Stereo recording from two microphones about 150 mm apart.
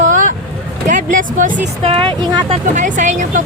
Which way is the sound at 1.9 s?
35° right (ahead or behind).